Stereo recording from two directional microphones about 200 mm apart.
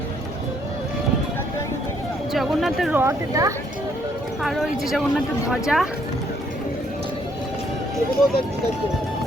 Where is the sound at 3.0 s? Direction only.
15° right (ahead or behind).